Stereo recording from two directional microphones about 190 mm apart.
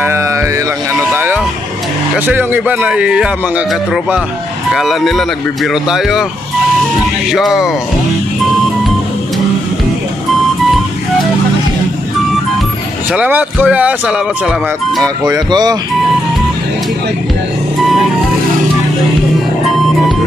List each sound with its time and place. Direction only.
0.0 s music: 15° right (ahead or behind)
0.9 s vehicle: 10° right (ahead or behind)
2.1 s a man's voice: 10° right (ahead or behind)
7.2 s speech: centre (ahead or behind)
13.1 s a man's voice: 5° right (ahead or behind)
15.3 s speech: 20° right (ahead or behind)